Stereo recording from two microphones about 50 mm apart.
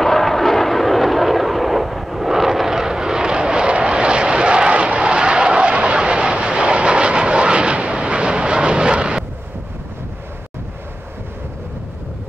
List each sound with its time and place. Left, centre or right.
0.0 s vehicle: centre